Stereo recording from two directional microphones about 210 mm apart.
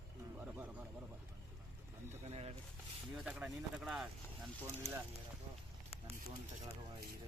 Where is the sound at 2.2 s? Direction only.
30° right (ahead or behind).